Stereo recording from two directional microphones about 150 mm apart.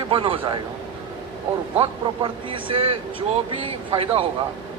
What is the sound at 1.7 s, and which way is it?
Speech, 35° right (ahead or behind).